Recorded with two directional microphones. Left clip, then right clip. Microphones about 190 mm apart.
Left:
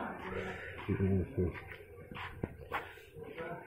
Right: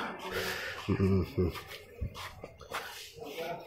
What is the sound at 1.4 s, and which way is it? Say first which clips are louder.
Speech: right 3 dB; 45° right (ahead or behind).